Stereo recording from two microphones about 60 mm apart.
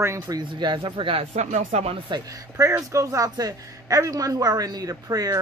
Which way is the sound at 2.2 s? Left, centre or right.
Right.